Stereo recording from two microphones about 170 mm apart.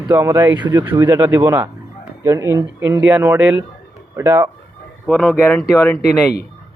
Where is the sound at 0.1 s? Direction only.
15° right (ahead or behind).